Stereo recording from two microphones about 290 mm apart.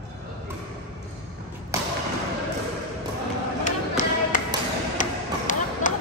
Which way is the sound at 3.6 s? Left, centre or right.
Left.